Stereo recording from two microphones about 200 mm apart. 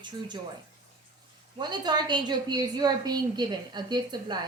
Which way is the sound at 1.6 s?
20° right (ahead or behind).